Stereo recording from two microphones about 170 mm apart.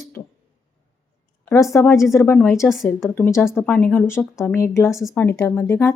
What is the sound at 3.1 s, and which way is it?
Speech, 10° left (ahead or behind).